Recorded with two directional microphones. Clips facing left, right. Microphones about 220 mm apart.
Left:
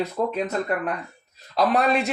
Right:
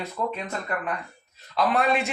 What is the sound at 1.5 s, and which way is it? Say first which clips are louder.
Speech: left 3 dB; 40° left (ahead or behind).